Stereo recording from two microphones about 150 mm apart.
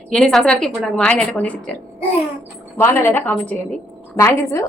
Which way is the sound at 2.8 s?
15° left (ahead or behind).